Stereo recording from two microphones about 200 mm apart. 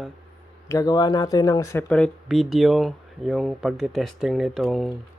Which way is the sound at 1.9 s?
5° left (ahead or behind).